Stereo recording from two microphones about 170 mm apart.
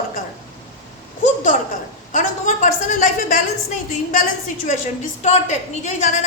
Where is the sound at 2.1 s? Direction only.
45° left (ahead or behind).